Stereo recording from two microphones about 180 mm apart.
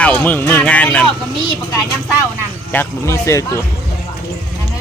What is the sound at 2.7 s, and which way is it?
Speech, 15° left (ahead or behind).